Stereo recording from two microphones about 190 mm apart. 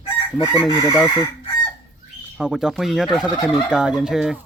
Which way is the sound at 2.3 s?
5° right (ahead or behind).